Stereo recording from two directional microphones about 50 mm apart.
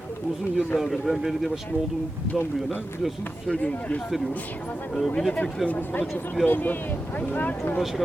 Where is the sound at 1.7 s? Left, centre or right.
Right.